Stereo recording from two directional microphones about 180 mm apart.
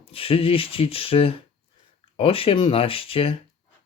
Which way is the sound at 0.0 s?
30° left (ahead or behind).